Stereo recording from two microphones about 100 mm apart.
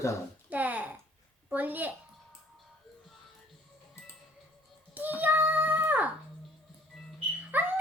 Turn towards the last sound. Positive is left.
turn(degrees=-20)  # may be behind; listen again after turning